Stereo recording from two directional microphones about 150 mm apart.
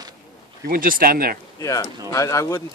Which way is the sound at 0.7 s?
70° right (ahead or behind).